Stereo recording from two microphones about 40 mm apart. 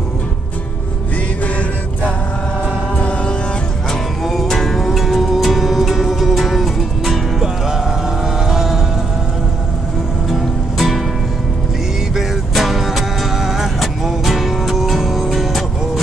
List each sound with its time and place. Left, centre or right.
3.0 s music: left
4.2 s music: centre
7.4 s music: centre
10.8 s music: centre
12.5 s music: centre